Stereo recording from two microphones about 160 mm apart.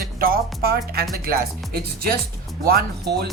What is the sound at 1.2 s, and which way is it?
Speech, 70° right (ahead or behind).